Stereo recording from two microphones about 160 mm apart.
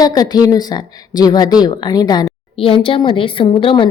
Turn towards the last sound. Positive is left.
turn(degrees=30)  # may be behind; listen again after turning